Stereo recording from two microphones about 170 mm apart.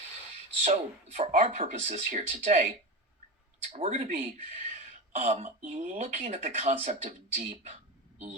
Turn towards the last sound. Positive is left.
turn(degrees=-40)  # may be behind; listen again after turning